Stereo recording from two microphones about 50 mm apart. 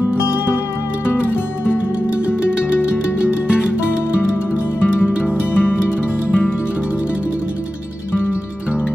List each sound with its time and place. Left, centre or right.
1.0 s music: left
4.8 s music: left